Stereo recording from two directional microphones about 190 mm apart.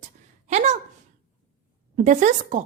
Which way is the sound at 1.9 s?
40° right (ahead or behind).